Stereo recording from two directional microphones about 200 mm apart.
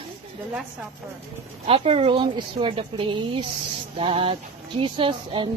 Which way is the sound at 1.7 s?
30° right (ahead or behind).